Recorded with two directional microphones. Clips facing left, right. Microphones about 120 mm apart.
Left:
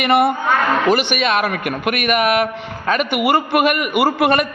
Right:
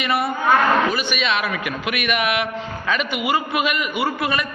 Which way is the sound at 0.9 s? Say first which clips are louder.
Left 7 dB; 75° left (ahead or behind).